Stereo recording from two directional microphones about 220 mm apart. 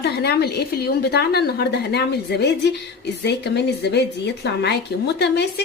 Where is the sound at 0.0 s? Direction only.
50° left (ahead or behind).